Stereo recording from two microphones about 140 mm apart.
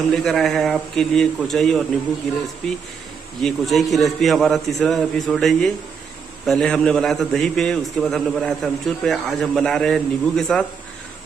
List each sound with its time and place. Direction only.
0.1 s a man's voice: centre (ahead or behind)